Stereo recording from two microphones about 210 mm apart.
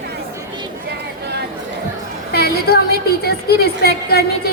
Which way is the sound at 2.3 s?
50° left (ahead or behind).